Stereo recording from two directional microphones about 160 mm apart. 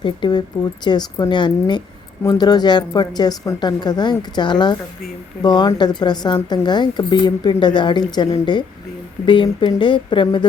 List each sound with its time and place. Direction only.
0.0 s speech: 30° left (ahead or behind)